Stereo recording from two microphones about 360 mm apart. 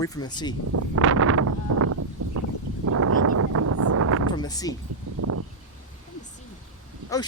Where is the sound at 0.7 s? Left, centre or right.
Right.